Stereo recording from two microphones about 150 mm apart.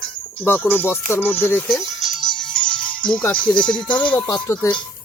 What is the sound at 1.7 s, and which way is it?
Music, centre (ahead or behind).